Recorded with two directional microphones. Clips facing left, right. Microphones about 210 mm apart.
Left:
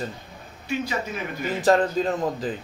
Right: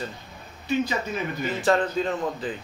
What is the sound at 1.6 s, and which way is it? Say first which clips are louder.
Speech: left 3 dB; 40° left (ahead or behind).